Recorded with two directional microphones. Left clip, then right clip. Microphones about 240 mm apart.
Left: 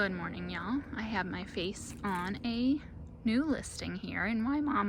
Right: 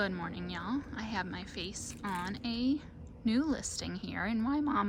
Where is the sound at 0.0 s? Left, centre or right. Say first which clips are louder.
Left 2 dB; centre.